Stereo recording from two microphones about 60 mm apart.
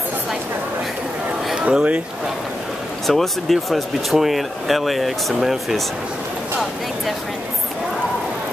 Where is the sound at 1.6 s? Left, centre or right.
Centre.